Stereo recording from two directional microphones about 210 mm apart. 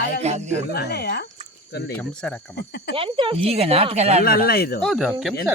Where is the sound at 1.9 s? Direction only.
5° left (ahead or behind).